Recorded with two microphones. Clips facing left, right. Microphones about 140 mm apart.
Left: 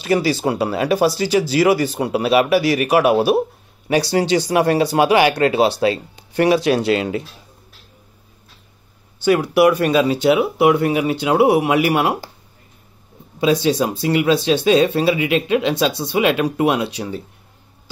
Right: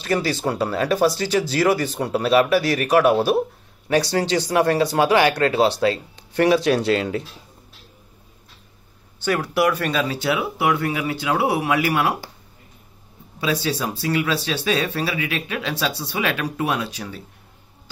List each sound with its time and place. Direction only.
0.0 s speech: 10° left (ahead or behind)
9.2 s speech: 15° left (ahead or behind)
13.4 s speech: 20° left (ahead or behind)